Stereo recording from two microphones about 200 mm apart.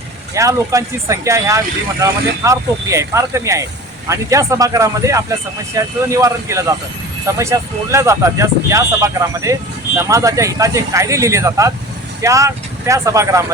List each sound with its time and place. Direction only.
0.3 s speech: 15° right (ahead or behind)